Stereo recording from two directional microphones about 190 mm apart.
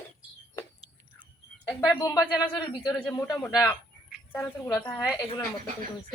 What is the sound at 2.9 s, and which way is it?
Speech, 10° left (ahead or behind).